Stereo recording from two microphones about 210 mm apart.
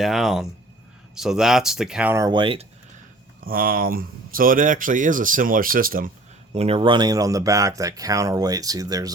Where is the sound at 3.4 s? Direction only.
45° right (ahead or behind).